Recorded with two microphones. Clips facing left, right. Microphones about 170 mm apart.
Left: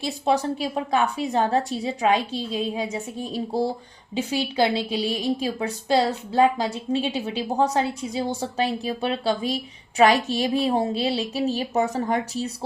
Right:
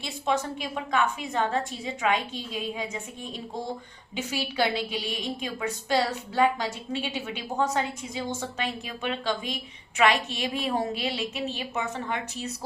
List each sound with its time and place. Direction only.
0.0 s a woman's voice: 35° left (ahead or behind)